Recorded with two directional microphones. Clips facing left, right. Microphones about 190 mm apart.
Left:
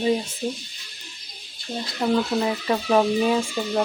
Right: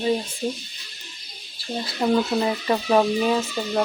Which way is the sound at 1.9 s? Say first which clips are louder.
Right 1 dB; 5° right (ahead or behind).